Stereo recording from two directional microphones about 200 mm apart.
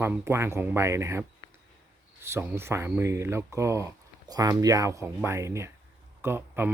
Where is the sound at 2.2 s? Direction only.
10° right (ahead or behind).